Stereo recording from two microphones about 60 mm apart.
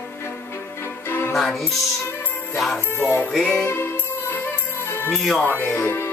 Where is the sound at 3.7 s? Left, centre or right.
Left.